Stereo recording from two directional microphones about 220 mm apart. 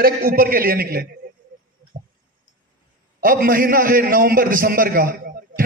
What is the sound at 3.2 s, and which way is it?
A man's voice, 40° right (ahead or behind).